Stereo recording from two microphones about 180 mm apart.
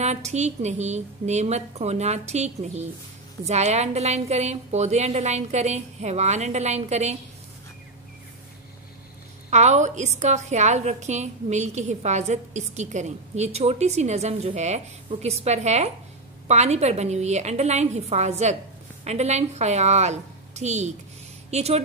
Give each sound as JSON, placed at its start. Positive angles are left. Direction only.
{"t": 0.0, "sound": "a woman's voice", "side_deg": -40}
{"t": 9.5, "sound": "a woman's voice", "side_deg": -40}